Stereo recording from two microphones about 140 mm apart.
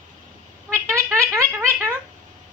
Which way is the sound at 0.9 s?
15° right (ahead or behind).